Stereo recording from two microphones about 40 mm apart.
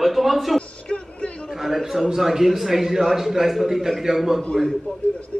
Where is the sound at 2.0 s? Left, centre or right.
Centre.